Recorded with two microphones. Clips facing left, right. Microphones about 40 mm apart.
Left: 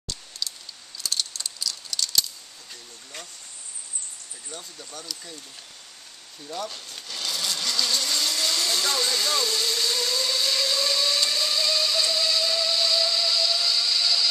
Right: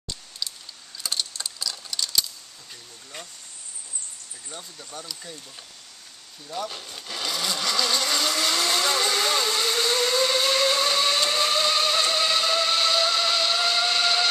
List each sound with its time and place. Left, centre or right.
0.4 s a sound: centre
4.5 s speech: centre
6.4 s speech: centre
7.1 s vehicle: centre; by 14.3 s right